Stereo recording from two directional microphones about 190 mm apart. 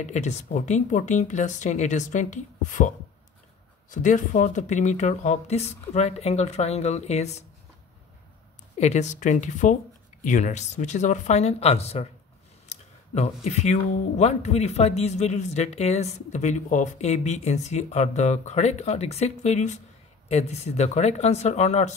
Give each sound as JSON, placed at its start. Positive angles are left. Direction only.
{"t": 0.0, "sound": "speech", "side_deg": 35}
{"t": 3.9, "sound": "speech", "side_deg": 40}
{"t": 8.7, "sound": "speech", "side_deg": 35}